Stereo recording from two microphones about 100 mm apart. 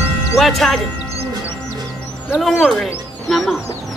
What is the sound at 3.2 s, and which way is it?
Music, centre (ahead or behind).